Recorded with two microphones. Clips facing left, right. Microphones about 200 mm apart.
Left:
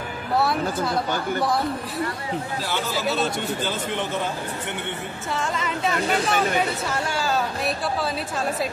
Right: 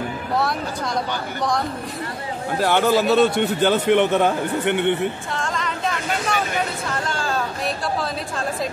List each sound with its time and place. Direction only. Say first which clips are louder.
2.6 s a man's voice: right 12 dB; 65° right (ahead or behind)
5.3 s speech: even; 5° left (ahead or behind)